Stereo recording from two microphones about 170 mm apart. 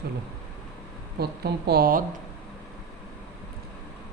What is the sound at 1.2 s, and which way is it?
Speech, 70° right (ahead or behind).